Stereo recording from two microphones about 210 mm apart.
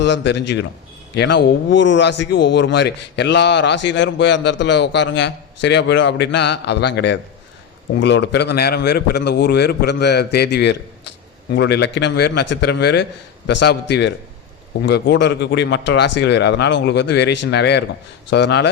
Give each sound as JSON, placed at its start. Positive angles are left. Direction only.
{"t": 0.0, "sound": "a man's voice", "side_deg": 55}